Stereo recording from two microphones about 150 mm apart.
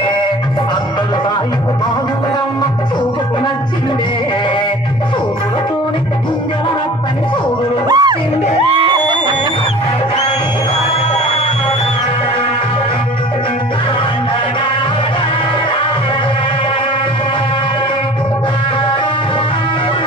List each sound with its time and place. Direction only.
7.9 s music: 30° right (ahead or behind)